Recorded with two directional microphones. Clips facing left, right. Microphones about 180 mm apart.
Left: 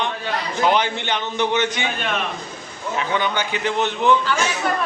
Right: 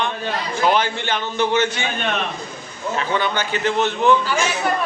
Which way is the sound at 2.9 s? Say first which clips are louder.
Even; 15° left (ahead or behind).